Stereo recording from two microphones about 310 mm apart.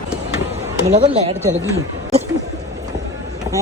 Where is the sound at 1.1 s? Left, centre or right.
Centre.